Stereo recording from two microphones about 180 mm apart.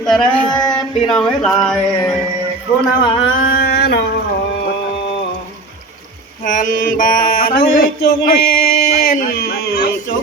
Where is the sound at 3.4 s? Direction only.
55° left (ahead or behind).